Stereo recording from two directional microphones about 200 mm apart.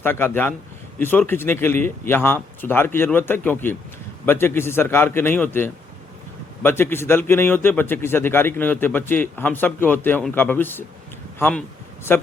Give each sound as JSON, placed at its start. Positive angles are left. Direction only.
{"t": 0.0, "sound": "a man's voice", "side_deg": 10}